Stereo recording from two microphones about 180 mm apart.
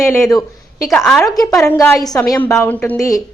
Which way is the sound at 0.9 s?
5° left (ahead or behind).